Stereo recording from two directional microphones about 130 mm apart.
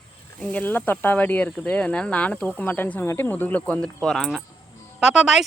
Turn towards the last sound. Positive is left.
turn(degrees=-5)  # may be behind; listen again after turning